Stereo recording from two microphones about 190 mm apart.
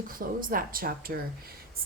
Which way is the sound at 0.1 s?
45° right (ahead or behind).